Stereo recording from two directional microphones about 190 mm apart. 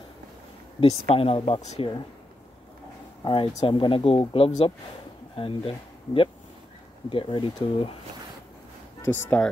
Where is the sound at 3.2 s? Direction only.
25° left (ahead or behind).